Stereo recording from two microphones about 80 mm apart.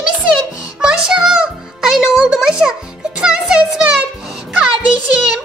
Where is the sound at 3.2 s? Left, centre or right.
Centre.